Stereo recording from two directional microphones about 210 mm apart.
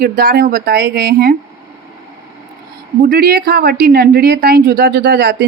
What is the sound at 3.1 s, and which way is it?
A woman's voice, 45° right (ahead or behind).